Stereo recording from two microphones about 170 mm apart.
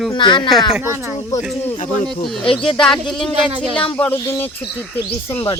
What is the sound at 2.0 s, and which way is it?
Speech, centre (ahead or behind).